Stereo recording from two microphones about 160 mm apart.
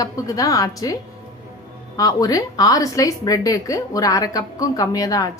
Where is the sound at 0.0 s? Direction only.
20° left (ahead or behind).